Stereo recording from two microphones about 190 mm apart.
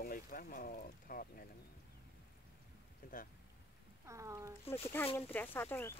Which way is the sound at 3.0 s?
45° left (ahead or behind).